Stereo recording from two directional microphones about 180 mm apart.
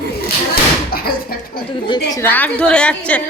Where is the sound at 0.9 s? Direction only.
55° left (ahead or behind).